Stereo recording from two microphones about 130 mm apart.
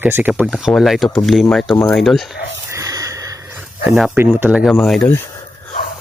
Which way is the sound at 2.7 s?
25° right (ahead or behind).